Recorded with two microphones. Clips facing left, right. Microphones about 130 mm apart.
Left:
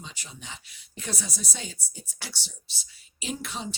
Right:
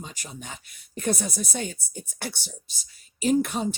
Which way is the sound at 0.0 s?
45° right (ahead or behind).